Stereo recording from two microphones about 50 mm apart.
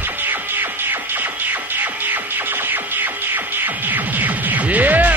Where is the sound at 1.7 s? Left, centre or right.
Right.